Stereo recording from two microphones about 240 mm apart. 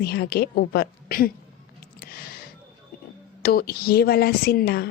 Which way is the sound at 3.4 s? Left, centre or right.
Left.